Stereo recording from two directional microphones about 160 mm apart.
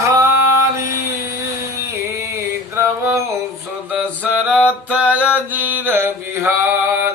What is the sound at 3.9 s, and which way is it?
Mantra, 10° right (ahead or behind).